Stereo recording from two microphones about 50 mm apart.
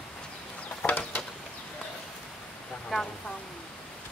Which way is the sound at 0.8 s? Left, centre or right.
Left.